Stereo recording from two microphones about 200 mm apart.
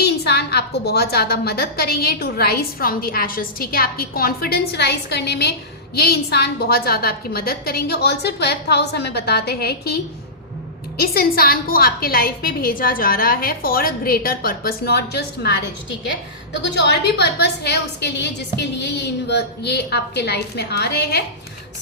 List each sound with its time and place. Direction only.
0.0 s a woman's voice: 55° left (ahead or behind)
16.7 s a woman's voice: 55° left (ahead or behind)